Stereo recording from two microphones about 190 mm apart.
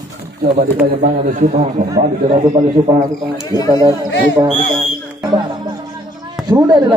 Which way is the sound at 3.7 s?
20° right (ahead or behind).